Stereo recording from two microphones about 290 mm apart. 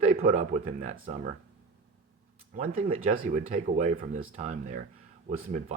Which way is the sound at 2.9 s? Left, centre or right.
Right.